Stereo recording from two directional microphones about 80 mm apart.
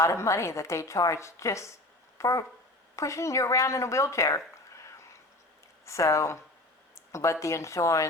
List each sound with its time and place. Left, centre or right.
0.0 s a woman's voice: left